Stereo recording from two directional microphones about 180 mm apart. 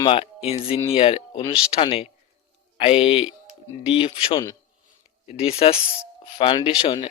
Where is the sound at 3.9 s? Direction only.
30° left (ahead or behind).